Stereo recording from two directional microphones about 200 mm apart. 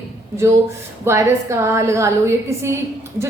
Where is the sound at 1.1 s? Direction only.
15° right (ahead or behind).